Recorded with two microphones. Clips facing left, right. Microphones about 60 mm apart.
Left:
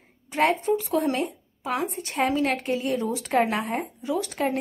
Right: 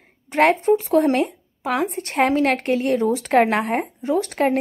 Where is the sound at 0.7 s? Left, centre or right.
Right.